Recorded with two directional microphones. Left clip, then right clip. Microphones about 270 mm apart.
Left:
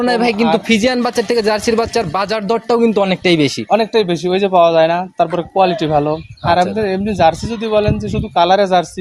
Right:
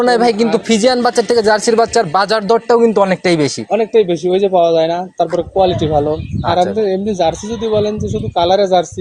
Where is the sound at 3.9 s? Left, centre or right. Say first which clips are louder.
Right 3 dB; left.